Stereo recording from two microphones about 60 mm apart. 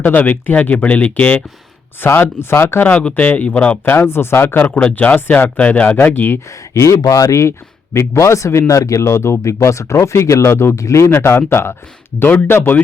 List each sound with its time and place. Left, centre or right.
0.0 s speech: left
2.1 s speech: left
2.8 s speech: centre
3.8 s speech: left
4.7 s speech: centre; by 6.4 s left
6.7 s speech: left
10.8 s speech: left
11.1 s speech: left